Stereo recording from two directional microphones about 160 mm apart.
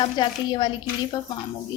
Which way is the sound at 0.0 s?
30° left (ahead or behind).